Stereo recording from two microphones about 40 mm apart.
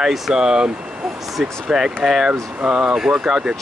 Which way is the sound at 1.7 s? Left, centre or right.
Centre.